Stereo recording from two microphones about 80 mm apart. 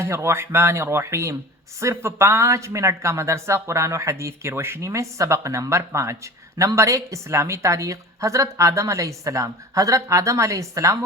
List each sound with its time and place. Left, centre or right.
0.0 s speech: right